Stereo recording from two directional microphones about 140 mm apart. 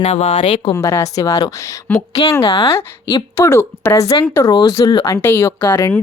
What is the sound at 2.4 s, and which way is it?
Speech, 40° left (ahead or behind).